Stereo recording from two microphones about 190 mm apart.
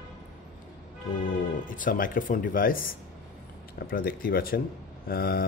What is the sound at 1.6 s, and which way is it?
Speech, 45° left (ahead or behind).